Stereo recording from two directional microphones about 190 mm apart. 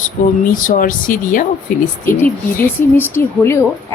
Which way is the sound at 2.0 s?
10° left (ahead or behind).